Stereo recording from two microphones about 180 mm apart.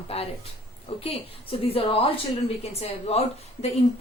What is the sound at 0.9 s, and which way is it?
A woman's voice, 30° left (ahead or behind).